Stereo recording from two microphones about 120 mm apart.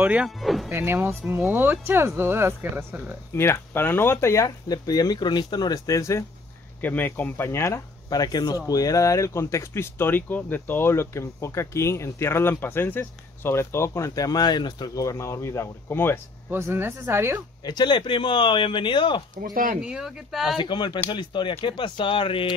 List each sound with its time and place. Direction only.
0.0 s speech: 10° right (ahead or behind)
0.4 s speech: centre (ahead or behind)
0.7 s speech: 20° right (ahead or behind)
3.3 s speech: 20° left (ahead or behind)
6.8 s speech: 15° left (ahead or behind)
16.4 s speech: 20° right (ahead or behind)
17.6 s speech: 40° left (ahead or behind)
19.8 s speech: 5° right (ahead or behind)
20.5 s speech: 40° left (ahead or behind)